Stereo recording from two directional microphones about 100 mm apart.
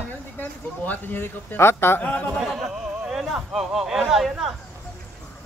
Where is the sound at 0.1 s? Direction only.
15° left (ahead or behind).